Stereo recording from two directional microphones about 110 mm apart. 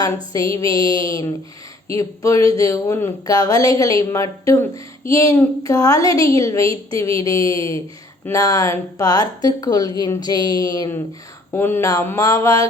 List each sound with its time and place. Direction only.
0.0 s a woman's voice: 30° left (ahead or behind)
11.5 s a woman's voice: 20° left (ahead or behind)